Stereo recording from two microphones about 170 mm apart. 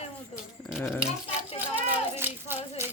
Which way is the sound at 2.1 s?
15° right (ahead or behind).